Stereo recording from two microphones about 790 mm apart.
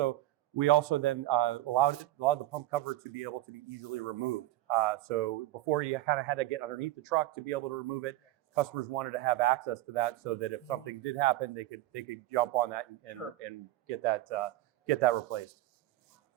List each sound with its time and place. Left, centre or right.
0.0 s speech: right